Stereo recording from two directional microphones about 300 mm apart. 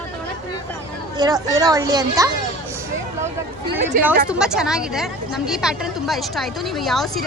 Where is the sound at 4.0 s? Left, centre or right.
Centre.